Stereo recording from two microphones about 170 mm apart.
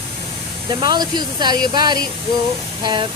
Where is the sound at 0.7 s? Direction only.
25° right (ahead or behind).